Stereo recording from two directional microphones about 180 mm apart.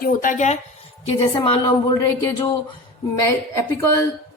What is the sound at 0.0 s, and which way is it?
Speech, 50° left (ahead or behind).